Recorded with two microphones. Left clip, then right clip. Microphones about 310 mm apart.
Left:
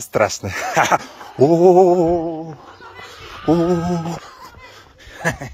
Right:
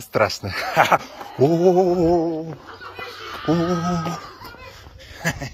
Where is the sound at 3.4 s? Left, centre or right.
Left.